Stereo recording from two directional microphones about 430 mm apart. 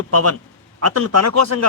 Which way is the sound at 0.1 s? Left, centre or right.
Right.